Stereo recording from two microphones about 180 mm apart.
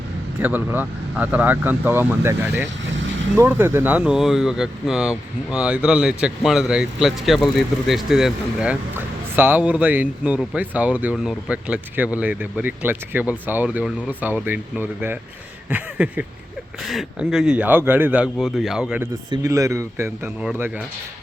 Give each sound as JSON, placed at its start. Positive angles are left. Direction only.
{"t": 0.3, "sound": "speech", "side_deg": -10}
{"t": 19.3, "sound": "speech", "side_deg": -20}